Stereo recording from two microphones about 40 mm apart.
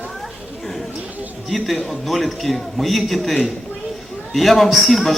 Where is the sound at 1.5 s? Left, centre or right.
Centre.